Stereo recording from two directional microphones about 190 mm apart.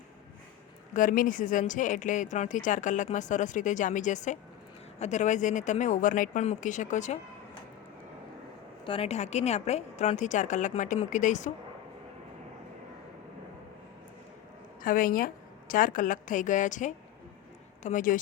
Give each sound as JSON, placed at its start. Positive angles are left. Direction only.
{"t": 0.9, "sound": "speech", "side_deg": 45}
{"t": 8.8, "sound": "speech", "side_deg": 30}
{"t": 14.8, "sound": "a woman's voice", "side_deg": 45}